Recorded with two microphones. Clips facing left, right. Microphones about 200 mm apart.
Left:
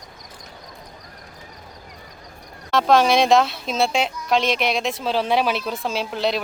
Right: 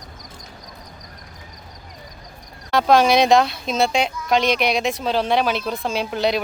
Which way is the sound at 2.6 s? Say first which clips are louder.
Right 1 dB; centre (ahead or behind).